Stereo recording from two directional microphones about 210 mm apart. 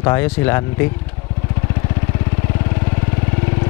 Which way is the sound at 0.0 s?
15° left (ahead or behind).